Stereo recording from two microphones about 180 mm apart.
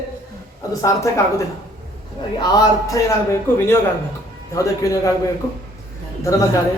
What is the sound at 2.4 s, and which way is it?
A man's voice, 20° left (ahead or behind).